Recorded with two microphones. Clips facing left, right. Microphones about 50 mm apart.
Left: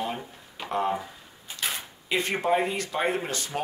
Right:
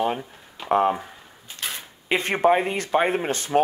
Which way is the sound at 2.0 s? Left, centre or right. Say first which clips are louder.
Right 6 dB; right.